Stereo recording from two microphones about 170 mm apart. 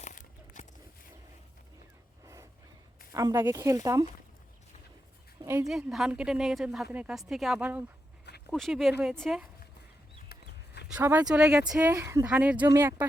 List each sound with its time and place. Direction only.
0.0 s a sound: 45° left (ahead or behind)
2.2 s a sound: 15° right (ahead or behind)
3.1 s a woman's voice: 20° right (ahead or behind)
5.6 s a woman's voice: centre (ahead or behind)
8.4 s a woman's voice: centre (ahead or behind)
10.3 s chicken: 65° left (ahead or behind)
10.9 s a woman's voice: 15° right (ahead or behind)